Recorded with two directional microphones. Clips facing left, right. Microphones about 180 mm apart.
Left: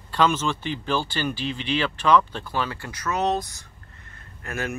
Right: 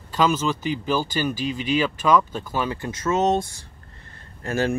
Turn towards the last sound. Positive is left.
turn(degrees=-30)  # may be behind; listen again after turning